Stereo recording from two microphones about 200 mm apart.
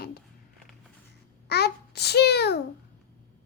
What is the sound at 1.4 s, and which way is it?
A child's voice, 55° left (ahead or behind).